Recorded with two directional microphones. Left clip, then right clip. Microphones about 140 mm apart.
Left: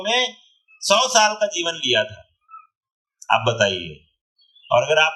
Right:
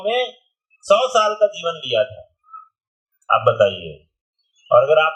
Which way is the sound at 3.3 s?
35° left (ahead or behind).